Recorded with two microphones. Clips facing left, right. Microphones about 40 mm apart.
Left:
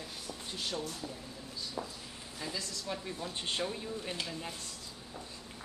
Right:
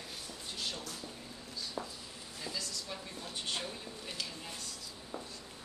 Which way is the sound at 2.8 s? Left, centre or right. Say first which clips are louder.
Left 5 dB; left.